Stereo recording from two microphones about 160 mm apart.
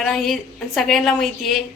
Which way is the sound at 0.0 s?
5° left (ahead or behind).